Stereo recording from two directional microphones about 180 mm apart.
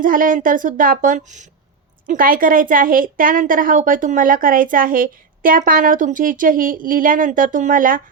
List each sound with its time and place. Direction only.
0.0 s a woman's voice: 50° right (ahead or behind)